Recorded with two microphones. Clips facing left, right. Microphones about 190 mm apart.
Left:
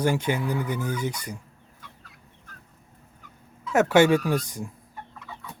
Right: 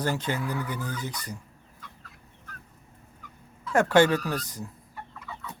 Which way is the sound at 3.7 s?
5° left (ahead or behind).